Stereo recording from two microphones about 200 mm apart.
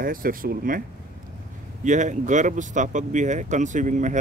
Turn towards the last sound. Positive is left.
turn(degrees=-40)  # may be behind; listen again after turning